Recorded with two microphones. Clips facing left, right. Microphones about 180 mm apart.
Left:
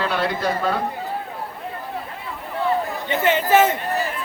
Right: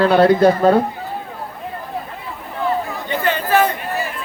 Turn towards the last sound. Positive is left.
turn(degrees=20)  # may be behind; listen again after turning